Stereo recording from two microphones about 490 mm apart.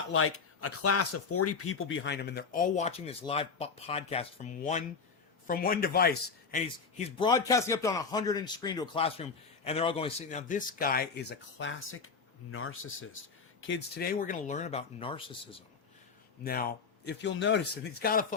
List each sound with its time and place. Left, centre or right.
0.1 s a man's voice: left; by 15.4 s centre
16.4 s a man's voice: centre